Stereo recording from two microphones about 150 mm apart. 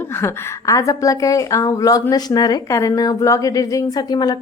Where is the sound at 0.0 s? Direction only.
15° left (ahead or behind).